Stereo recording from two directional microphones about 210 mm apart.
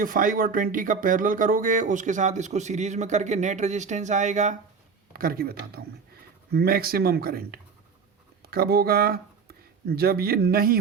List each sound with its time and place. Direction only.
0.0 s speech: 40° right (ahead or behind)
5.1 s speech: 45° right (ahead or behind)